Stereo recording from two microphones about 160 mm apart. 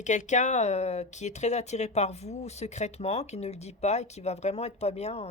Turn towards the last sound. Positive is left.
turn(degrees=40)  # may be behind; listen again after turning